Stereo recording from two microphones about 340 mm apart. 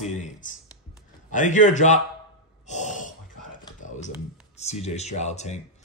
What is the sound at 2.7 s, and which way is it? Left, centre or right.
Gasp, left.